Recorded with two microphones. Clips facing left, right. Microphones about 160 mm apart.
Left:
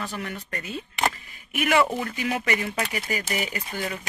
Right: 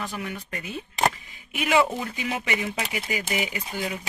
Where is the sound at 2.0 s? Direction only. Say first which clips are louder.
Left 2 dB; 20° right (ahead or behind).